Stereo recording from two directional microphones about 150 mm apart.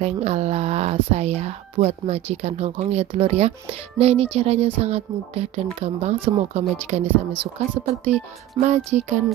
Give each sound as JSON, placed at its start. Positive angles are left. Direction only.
{"t": 0.0, "sound": "speech", "side_deg": -45}